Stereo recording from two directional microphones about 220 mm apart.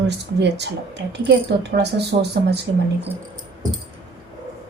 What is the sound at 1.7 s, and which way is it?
Speech, 50° right (ahead or behind).